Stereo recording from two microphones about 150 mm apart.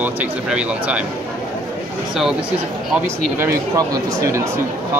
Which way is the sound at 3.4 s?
20° right (ahead or behind).